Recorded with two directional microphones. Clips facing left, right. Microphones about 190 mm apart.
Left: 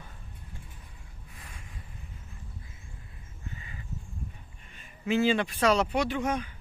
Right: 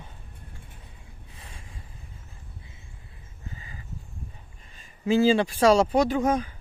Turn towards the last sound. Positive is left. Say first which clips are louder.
# right 6 dB
turn(degrees=-35)  # may be behind; listen again after turning